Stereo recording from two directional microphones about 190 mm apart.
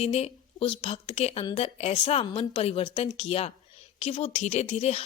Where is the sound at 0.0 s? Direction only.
35° left (ahead or behind).